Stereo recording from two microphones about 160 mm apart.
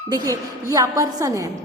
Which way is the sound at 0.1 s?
20° right (ahead or behind).